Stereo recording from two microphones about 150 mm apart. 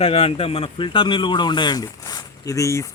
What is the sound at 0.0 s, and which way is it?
A man's voice, 40° left (ahead or behind).